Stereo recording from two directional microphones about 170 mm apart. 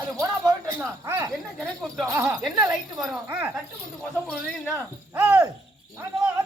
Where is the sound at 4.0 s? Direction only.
5° left (ahead or behind).